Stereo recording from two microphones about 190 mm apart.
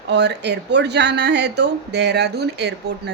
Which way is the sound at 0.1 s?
65° right (ahead or behind).